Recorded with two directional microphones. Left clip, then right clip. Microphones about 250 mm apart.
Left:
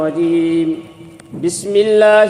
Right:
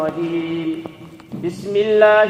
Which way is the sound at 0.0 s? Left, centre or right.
Left.